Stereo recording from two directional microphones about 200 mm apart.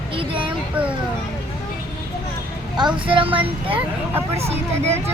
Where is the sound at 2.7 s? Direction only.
25° right (ahead or behind).